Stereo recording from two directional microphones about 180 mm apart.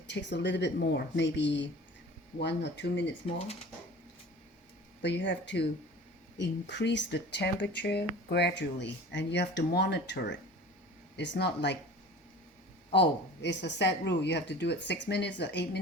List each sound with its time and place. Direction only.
0.1 s speech: 75° left (ahead or behind)
5.0 s speech: 80° left
12.9 s speech: 75° left (ahead or behind)